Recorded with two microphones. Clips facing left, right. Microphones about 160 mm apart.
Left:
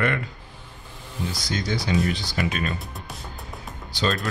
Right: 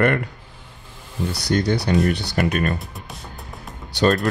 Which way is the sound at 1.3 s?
65° right (ahead or behind).